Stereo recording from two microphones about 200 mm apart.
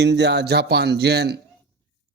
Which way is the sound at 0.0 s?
60° right (ahead or behind).